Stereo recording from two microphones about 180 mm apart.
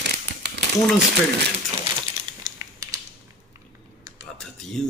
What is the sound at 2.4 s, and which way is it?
Typing, 20° right (ahead or behind).